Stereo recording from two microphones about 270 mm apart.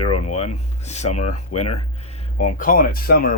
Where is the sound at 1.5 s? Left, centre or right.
Left.